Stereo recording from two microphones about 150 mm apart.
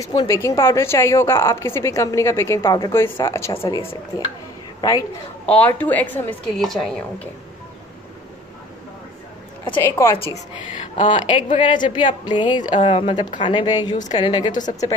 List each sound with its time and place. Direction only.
0.0 s a woman's voice: 25° left (ahead or behind)
5.5 s a woman's voice: 10° left (ahead or behind)
9.8 s a woman's voice: 15° left (ahead or behind)
11.0 s a woman's voice: 35° left (ahead or behind)